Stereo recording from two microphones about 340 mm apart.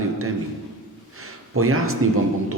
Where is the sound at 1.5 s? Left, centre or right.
Right.